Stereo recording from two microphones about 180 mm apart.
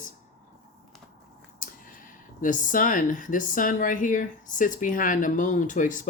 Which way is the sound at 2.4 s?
45° left (ahead or behind).